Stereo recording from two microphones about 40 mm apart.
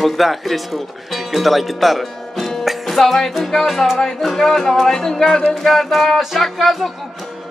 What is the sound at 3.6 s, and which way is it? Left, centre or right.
Music, centre.